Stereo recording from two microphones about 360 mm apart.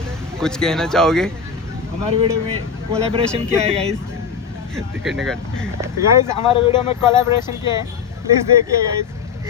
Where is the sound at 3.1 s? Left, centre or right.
Centre.